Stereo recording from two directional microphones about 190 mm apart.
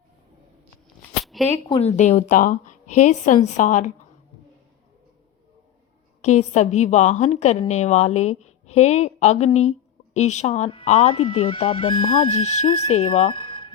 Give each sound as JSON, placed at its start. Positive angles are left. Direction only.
{"t": 1.1, "sound": "a sound", "side_deg": 0}
{"t": 1.7, "sound": "speech", "side_deg": 35}
{"t": 6.2, "sound": "speech", "side_deg": 35}